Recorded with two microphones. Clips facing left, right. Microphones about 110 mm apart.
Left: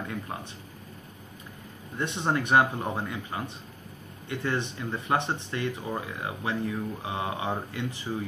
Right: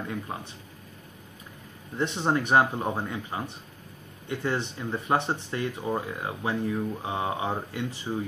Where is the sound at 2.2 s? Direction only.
15° right (ahead or behind).